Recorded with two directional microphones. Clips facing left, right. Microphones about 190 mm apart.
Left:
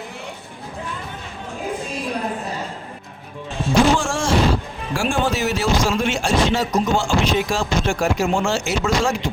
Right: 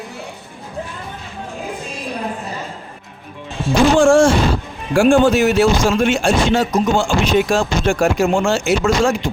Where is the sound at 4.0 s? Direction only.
55° right (ahead or behind).